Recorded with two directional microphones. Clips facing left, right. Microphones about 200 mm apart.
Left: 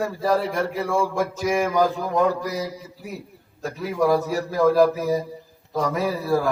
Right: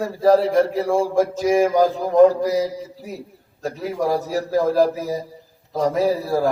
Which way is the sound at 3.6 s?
35° right (ahead or behind).